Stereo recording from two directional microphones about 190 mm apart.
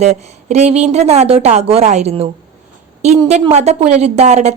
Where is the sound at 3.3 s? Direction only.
35° right (ahead or behind).